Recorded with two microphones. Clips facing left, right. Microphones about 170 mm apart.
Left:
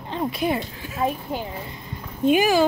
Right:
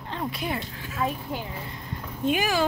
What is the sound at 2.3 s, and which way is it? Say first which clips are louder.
Speech: left 8 dB; 10° left (ahead or behind).